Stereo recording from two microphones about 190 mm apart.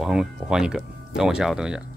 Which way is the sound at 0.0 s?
Centre (ahead or behind).